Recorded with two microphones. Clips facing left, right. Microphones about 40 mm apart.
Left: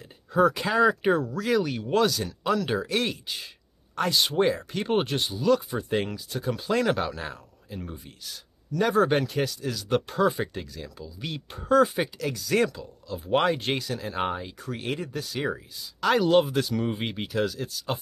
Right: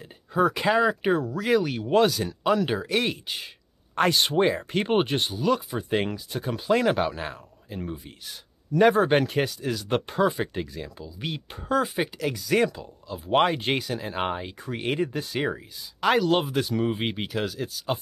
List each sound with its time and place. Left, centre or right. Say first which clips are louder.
0.3 s speech: right 1 dB; centre
3.9 s speech: right 3 dB; right
5.0 s speech: right 2 dB; right
5.3 s speech: left 1 dB; centre
8.7 s speech: right 3 dB; right
9.5 s speech: even; centre